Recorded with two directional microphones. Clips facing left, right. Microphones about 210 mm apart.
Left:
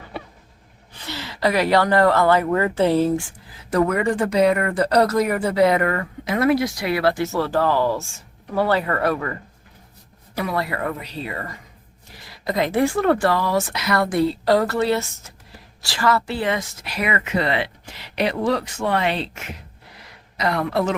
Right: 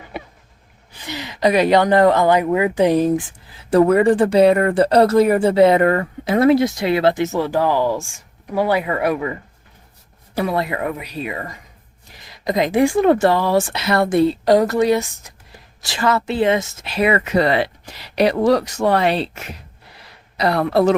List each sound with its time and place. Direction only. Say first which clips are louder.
1.0 s speech: right 4 dB; 15° right (ahead or behind)
10.3 s speech: right 4 dB; 25° right (ahead or behind)